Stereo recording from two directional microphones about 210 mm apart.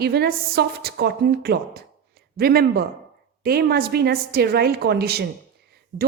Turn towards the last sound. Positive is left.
turn(degrees=-40)  # may be behind; listen again after turning